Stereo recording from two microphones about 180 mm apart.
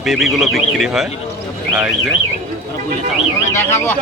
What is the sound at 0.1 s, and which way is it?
Speech, centre (ahead or behind).